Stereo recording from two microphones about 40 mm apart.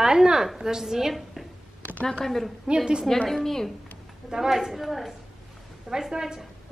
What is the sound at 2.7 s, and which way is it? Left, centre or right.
Speech, right.